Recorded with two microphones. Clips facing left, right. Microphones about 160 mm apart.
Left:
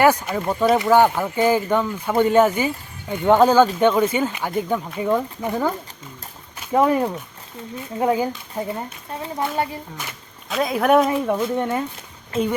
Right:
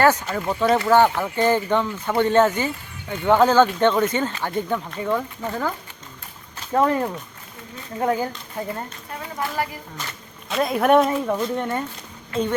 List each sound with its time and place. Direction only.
0.0 s speech: 10° left (ahead or behind)
9.1 s a woman's voice: 25° left (ahead or behind)
10.5 s speech: centre (ahead or behind)